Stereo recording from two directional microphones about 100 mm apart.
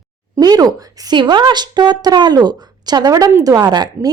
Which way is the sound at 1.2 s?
50° right (ahead or behind).